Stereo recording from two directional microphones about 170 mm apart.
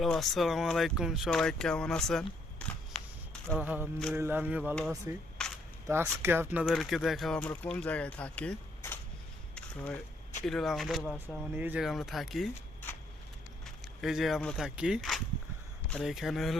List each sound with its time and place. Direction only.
0.0 s speech: centre (ahead or behind)
3.6 s speech: 10° right (ahead or behind); by 9.0 s 10° left (ahead or behind)
9.6 s a sound: 5° left (ahead or behind)
10.4 s speech: centre (ahead or behind)
11.5 s speech: 10° right (ahead or behind)
13.7 s speech: centre (ahead or behind)